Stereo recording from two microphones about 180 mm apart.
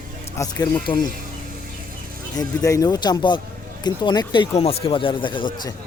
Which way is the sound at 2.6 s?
20° left (ahead or behind).